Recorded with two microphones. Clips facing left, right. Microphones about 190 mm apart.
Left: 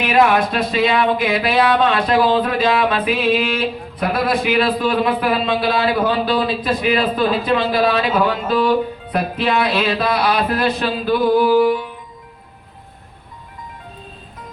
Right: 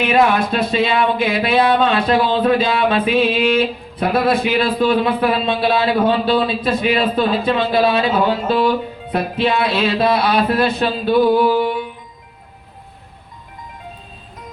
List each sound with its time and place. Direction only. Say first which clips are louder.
0.0 s a man's voice: even; 30° right (ahead or behind)